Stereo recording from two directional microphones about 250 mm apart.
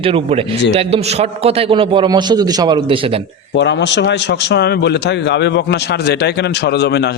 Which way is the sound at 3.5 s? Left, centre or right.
Left.